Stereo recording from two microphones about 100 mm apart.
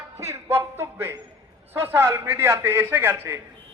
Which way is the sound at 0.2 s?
25° right (ahead or behind).